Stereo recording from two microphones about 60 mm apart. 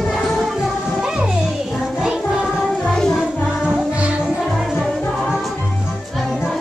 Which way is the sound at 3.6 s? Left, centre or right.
Centre.